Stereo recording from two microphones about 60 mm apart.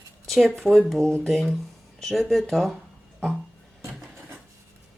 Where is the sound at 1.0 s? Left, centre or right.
Centre.